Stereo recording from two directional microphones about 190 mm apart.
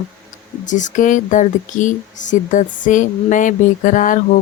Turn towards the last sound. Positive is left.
turn(degrees=40)  # may be behind; listen again after turning